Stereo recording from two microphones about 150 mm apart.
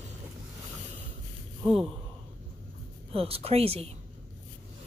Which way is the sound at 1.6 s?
Centre (ahead or behind).